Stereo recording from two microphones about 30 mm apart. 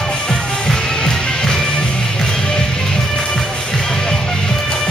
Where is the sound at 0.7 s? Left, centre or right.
Centre.